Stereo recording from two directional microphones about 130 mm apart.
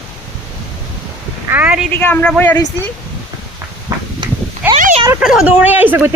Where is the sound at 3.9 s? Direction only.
25° right (ahead or behind).